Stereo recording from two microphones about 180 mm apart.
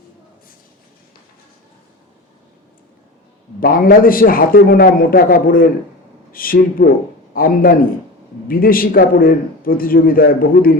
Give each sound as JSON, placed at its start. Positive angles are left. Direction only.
{"t": 3.6, "sound": "a man's voice", "side_deg": 55}